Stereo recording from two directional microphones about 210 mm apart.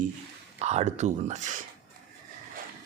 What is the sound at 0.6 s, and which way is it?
Speech, 30° right (ahead or behind).